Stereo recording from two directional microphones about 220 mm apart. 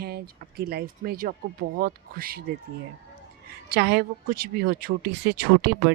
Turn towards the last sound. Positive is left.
turn(degrees=-45)  # may be behind; listen again after turning